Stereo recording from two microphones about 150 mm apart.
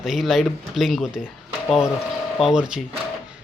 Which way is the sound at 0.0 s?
Centre (ahead or behind).